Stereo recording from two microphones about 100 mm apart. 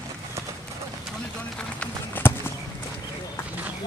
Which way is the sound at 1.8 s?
20° left (ahead or behind).